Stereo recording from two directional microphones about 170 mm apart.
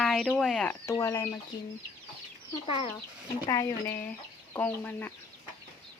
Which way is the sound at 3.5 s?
20° left (ahead or behind).